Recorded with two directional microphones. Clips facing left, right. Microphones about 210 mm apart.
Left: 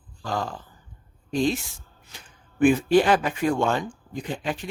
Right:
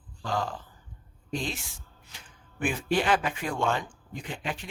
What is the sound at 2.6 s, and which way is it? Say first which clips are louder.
Speech: left 10 dB; 40° left (ahead or behind).